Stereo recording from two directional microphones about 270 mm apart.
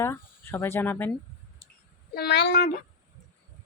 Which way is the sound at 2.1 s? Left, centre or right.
Left.